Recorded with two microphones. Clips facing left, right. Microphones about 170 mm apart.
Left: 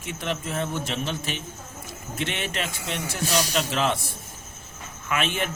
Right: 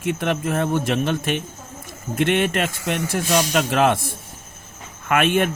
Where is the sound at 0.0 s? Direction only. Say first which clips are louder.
Right 8 dB; 60° right (ahead or behind).